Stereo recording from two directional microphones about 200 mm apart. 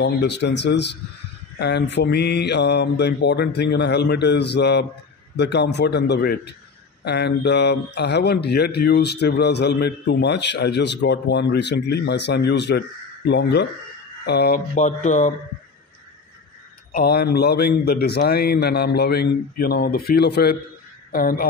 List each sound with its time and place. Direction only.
0.0 s speech: 60° left (ahead or behind); by 15.3 s 35° left (ahead or behind)
16.9 s a man's voice: 50° left (ahead or behind)